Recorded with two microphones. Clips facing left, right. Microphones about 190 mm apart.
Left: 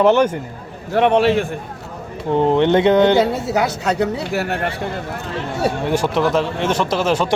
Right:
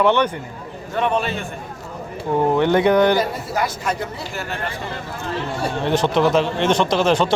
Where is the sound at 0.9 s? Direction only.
70° left (ahead or behind).